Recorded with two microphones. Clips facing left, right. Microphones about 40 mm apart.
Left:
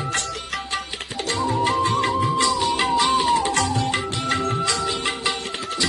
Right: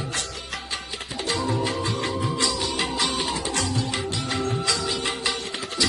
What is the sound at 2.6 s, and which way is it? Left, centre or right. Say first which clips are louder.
Music: left 6 dB; left.